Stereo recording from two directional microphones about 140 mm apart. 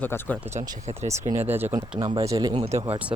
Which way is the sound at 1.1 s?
20° right (ahead or behind).